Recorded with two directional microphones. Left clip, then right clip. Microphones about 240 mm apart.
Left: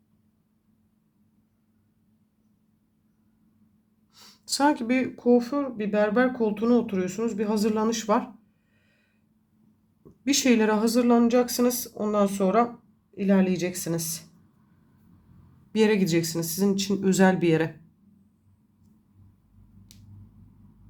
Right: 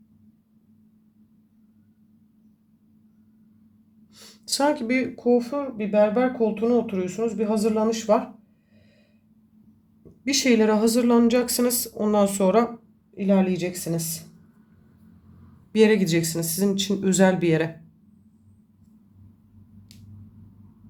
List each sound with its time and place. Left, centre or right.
4.1 s speech: centre
10.2 s speech: centre
13.1 s speech: centre
15.7 s speech: centre